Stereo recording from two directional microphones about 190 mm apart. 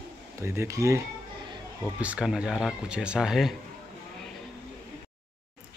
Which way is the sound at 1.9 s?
5° right (ahead or behind).